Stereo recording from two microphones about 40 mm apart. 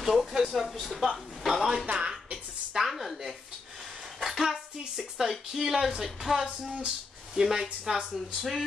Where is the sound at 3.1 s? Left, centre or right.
Centre.